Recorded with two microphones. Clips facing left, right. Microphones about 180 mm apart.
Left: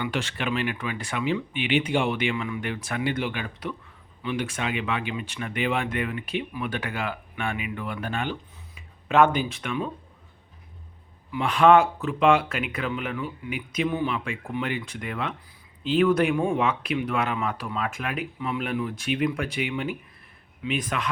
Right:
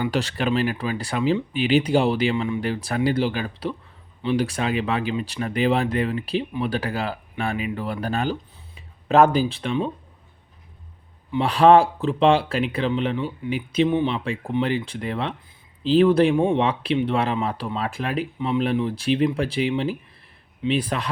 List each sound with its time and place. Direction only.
0.0 s speech: 35° right (ahead or behind)
11.3 s speech: 35° right (ahead or behind)